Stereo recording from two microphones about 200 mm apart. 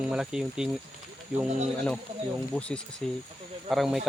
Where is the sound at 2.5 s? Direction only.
10° left (ahead or behind).